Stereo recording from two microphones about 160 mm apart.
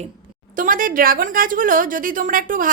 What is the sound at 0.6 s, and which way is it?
A woman's voice, 60° right (ahead or behind).